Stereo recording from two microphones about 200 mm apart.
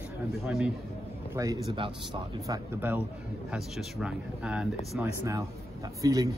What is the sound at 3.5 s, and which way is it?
A man's voice, centre (ahead or behind).